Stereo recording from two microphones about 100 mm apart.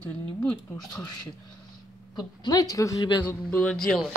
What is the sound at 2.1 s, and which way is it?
Speech, 45° left (ahead or behind).